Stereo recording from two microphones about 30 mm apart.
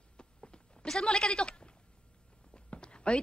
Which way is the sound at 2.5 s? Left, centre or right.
Left.